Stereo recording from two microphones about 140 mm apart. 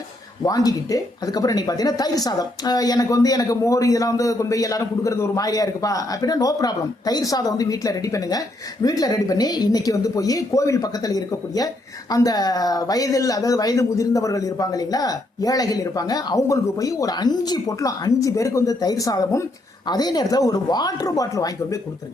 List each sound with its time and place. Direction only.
0.4 s speech: 25° left (ahead or behind)